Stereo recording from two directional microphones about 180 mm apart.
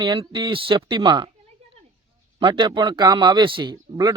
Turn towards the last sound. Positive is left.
turn(degrees=-20)  # may be behind; listen again after turning